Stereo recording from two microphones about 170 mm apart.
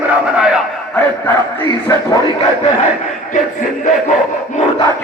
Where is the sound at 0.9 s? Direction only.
10° left (ahead or behind).